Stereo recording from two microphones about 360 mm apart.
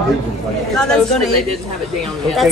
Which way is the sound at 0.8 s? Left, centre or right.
Centre.